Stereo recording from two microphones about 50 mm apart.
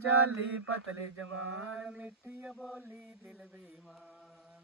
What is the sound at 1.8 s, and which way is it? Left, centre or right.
Mantra, right.